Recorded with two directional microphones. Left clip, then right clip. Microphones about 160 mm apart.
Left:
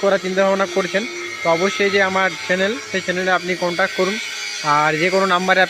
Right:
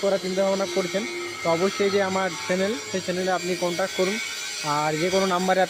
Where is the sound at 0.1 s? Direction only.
20° left (ahead or behind).